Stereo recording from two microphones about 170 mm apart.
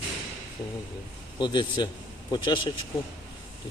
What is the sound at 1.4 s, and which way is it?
Speech, 30° left (ahead or behind).